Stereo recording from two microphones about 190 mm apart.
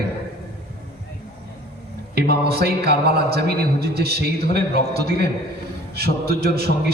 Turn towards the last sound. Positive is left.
turn(degrees=-55)  # may be behind; listen again after turning